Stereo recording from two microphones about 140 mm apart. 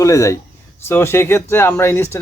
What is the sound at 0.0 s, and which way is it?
Speech, 20° left (ahead or behind).